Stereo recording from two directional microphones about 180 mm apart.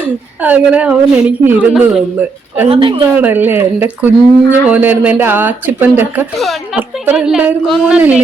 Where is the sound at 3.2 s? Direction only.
10° right (ahead or behind).